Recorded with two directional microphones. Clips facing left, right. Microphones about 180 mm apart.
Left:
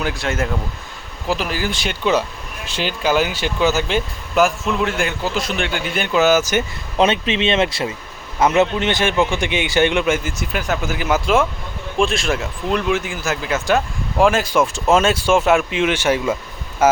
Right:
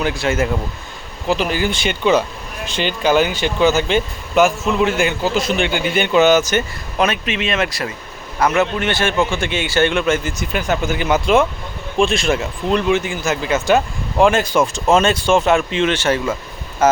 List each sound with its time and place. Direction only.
0.0 s speech: centre (ahead or behind)
7.0 s a man's voice: 25° left (ahead or behind); by 17.0 s 10° left (ahead or behind)